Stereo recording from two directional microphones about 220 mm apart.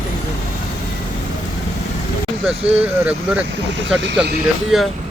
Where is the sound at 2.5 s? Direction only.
5° right (ahead or behind).